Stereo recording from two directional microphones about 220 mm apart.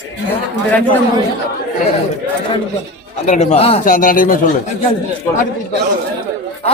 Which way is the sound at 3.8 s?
40° left (ahead or behind).